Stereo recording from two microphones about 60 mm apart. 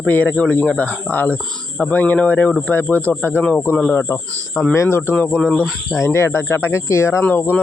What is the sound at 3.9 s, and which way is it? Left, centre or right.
Speech, left.